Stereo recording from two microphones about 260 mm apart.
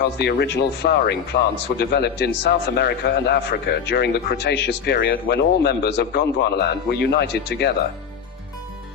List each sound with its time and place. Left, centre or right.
0.0 s a man's voice: left